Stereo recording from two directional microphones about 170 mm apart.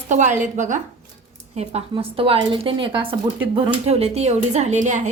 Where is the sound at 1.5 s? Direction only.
35° right (ahead or behind).